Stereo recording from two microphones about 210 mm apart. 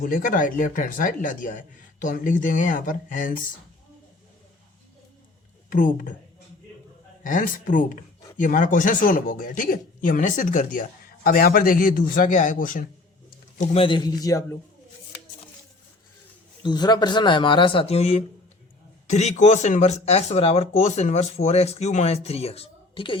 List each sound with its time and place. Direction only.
0.0 s speech: 40° left (ahead or behind)
5.7 s speech: 40° left (ahead or behind)
7.3 s speech: 40° left (ahead or behind)
13.6 s speech: 25° left (ahead or behind)
16.6 s speech: 20° left (ahead or behind)